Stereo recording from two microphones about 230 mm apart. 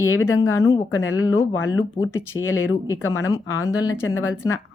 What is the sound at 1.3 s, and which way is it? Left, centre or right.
Speech, left.